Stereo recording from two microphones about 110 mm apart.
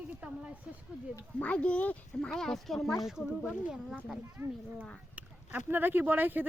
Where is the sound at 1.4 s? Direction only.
10° left (ahead or behind).